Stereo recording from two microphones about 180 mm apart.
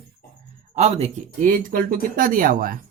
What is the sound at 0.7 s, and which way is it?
Speech, 40° right (ahead or behind).